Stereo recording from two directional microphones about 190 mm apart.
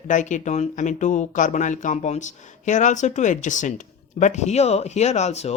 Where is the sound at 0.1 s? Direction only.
40° left (ahead or behind).